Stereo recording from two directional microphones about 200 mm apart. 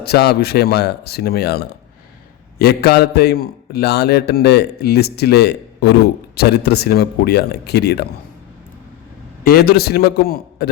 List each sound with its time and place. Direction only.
0.0 s a man's voice: 55° left (ahead or behind)
9.4 s a man's voice: 50° left (ahead or behind)